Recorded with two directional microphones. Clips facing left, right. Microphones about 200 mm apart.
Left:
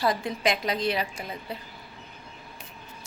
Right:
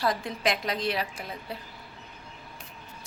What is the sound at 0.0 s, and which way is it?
A woman's voice, centre (ahead or behind).